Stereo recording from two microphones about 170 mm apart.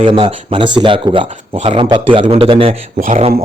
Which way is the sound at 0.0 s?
30° right (ahead or behind).